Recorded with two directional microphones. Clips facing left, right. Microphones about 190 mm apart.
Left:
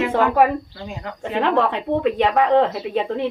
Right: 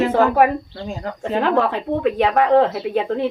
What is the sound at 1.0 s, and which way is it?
Speech, 40° right (ahead or behind).